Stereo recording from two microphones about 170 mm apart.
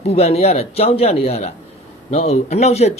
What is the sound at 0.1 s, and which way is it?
Speech, 40° left (ahead or behind).